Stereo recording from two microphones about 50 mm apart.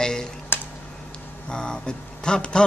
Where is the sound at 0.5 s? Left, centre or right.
Left.